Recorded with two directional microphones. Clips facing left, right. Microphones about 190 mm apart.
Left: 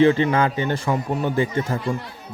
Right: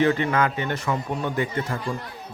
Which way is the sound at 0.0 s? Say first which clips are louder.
Left 4 dB; 30° left (ahead or behind).